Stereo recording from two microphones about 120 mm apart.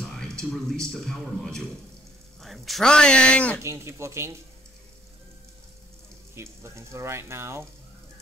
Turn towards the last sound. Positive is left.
turn(degrees=-20)  # may be behind; listen again after turning